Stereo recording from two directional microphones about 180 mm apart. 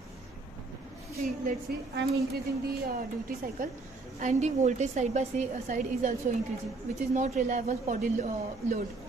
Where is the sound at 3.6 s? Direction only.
50° right (ahead or behind).